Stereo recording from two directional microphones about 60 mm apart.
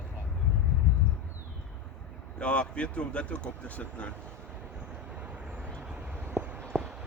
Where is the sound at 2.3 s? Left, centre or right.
Centre.